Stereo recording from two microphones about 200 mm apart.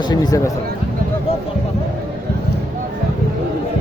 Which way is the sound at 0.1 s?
20° left (ahead or behind).